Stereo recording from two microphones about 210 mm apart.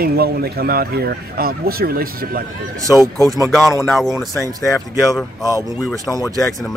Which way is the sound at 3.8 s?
Centre (ahead or behind).